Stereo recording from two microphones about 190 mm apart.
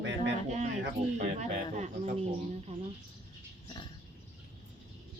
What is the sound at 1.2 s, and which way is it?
Speech, 40° right (ahead or behind).